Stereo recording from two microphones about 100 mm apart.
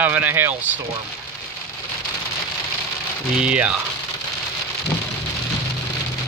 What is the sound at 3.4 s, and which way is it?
Speech, 10° right (ahead or behind).